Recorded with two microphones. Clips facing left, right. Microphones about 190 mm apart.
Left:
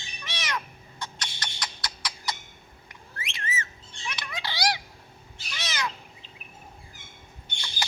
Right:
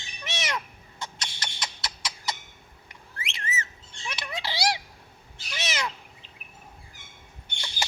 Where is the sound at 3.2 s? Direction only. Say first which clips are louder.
Even; 25° right (ahead or behind).